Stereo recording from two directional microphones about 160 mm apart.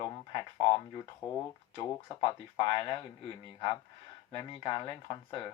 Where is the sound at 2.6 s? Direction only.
30° left (ahead or behind).